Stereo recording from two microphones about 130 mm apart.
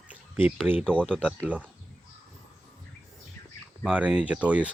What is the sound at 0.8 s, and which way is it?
Speech, 10° left (ahead or behind).